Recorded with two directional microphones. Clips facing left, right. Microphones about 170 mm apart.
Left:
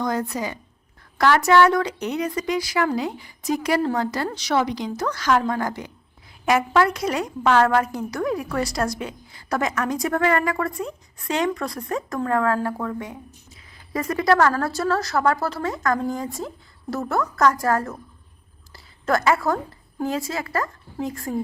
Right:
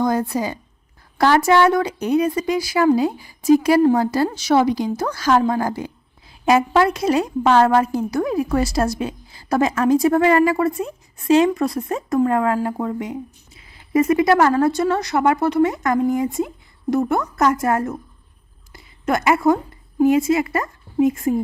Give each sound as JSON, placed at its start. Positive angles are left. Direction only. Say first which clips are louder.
{"t": 0.0, "sound": "a woman's voice", "louder": "right 5 dB", "side_deg": -30}
{"t": 18.7, "sound": "a sound", "louder": "right 1 dB", "side_deg": -20}
{"t": 20.0, "sound": "a woman's voice", "louder": "right 11 dB", "side_deg": -20}